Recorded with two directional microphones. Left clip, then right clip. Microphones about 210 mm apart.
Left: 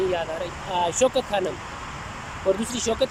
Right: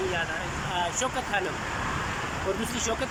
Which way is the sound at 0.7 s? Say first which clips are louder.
Left 8 dB; 20° left (ahead or behind).